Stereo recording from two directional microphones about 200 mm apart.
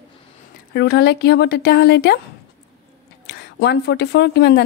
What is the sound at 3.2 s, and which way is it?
Speech, 60° left (ahead or behind).